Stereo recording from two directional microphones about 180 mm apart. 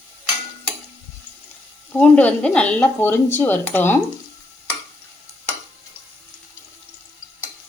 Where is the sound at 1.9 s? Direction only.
10° left (ahead or behind).